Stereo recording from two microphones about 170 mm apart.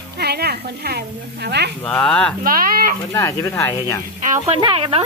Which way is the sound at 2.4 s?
55° right (ahead or behind).